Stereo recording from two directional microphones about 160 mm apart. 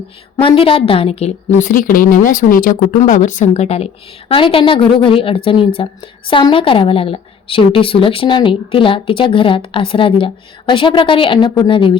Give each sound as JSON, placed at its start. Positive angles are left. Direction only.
{"t": 0.4, "sound": "a woman's voice", "side_deg": 35}
{"t": 1.6, "sound": "a woman's voice", "side_deg": 60}